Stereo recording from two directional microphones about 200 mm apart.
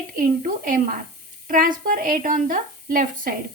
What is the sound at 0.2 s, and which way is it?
A woman's voice, 45° right (ahead or behind).